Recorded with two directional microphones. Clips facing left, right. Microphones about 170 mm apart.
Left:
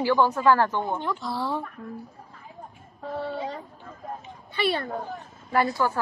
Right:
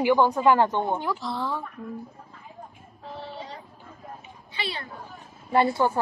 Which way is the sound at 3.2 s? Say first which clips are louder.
Left 8 dB; 55° left (ahead or behind).